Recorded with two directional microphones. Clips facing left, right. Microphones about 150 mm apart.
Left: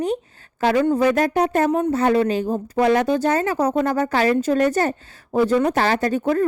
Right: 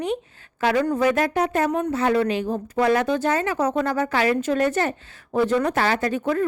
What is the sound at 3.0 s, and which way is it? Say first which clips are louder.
Speech: left 3 dB; 40° left (ahead or behind).